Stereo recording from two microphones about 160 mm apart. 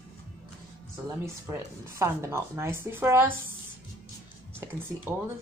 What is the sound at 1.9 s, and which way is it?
Speech, 15° right (ahead or behind).